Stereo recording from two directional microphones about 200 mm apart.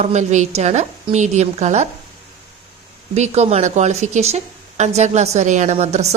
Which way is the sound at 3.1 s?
35° right (ahead or behind).